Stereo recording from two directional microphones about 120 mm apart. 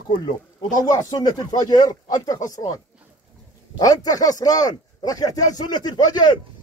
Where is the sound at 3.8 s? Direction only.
30° left (ahead or behind).